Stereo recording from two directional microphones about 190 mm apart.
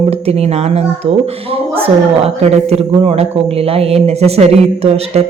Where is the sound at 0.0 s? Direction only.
30° right (ahead or behind).